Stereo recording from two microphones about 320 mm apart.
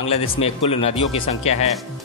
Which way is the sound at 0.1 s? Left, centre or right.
Centre.